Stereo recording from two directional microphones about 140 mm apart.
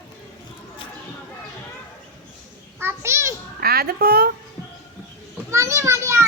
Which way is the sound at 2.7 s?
20° right (ahead or behind).